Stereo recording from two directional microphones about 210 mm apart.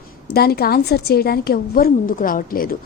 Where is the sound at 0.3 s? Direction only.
50° left (ahead or behind).